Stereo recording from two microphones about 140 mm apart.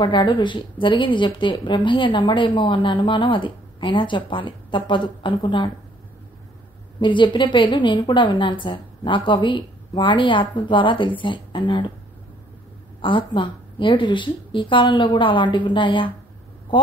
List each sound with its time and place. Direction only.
0.0 s a woman's voice: 35° left (ahead or behind)
7.0 s a woman's voice: 35° left (ahead or behind)
13.0 s a woman's voice: 35° left (ahead or behind)